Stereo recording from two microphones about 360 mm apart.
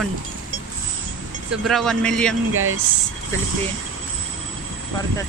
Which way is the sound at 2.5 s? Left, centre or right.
Right.